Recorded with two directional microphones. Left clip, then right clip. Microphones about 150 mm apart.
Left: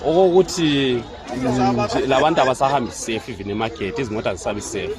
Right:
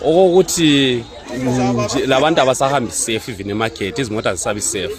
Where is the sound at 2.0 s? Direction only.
85° right.